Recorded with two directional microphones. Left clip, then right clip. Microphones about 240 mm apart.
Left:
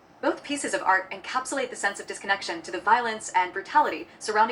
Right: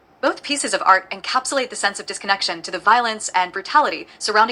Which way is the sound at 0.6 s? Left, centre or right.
Right.